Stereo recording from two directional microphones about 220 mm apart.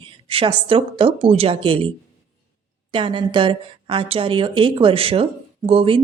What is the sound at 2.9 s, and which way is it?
A woman's voice, 25° right (ahead or behind).